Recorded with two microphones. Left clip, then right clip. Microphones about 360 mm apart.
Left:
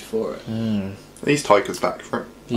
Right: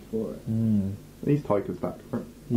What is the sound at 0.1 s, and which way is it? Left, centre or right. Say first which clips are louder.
Speech: left 7 dB; centre.